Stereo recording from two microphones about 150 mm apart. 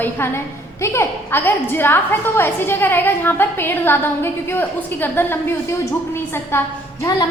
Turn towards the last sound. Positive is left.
turn(degrees=25)  # may be behind; listen again after turning